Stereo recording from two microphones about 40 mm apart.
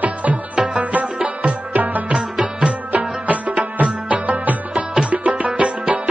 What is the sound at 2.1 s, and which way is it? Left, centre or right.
Music, centre.